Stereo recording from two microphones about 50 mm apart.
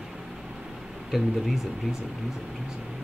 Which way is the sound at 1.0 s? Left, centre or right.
Centre.